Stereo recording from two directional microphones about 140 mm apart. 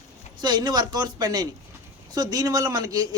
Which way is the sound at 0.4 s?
30° right (ahead or behind).